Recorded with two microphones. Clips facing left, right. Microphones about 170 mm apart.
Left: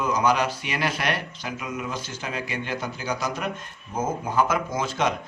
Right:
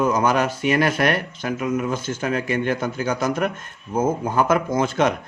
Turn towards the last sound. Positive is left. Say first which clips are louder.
# right 6 dB
turn(degrees=-55)  # may be behind; listen again after turning